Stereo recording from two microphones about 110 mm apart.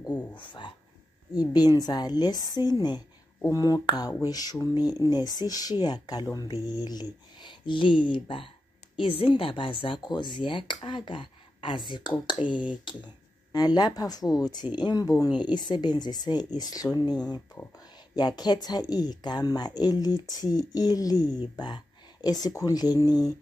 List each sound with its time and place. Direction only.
0.4 s speech: 45° left (ahead or behind)